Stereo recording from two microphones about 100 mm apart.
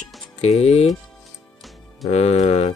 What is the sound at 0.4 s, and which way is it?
Speech, 90° left.